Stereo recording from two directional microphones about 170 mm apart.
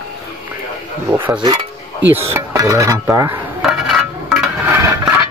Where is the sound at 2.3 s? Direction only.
20° right (ahead or behind).